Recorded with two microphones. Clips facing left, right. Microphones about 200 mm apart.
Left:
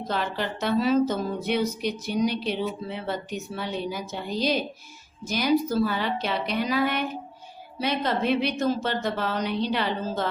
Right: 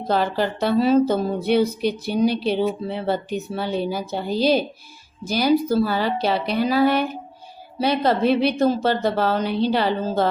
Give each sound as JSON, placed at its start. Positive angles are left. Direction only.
{"t": 0.1, "sound": "a woman's voice", "side_deg": -35}